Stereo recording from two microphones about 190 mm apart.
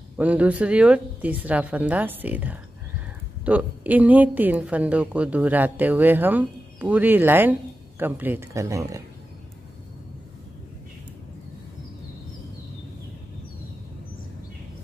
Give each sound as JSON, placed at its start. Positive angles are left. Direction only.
{"t": 0.2, "sound": "a woman's voice", "side_deg": -5}